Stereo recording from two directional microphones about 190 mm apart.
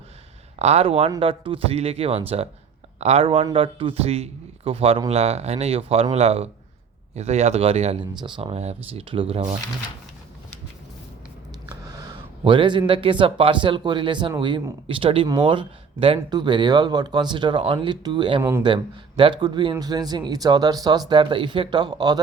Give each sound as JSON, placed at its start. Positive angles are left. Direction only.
{"t": 0.6, "sound": "a man's voice", "side_deg": -35}
{"t": 11.7, "sound": "a sound", "side_deg": -20}
{"t": 12.9, "sound": "speech", "side_deg": -25}